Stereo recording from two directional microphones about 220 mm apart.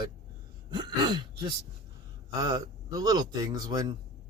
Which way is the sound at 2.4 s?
15° right (ahead or behind).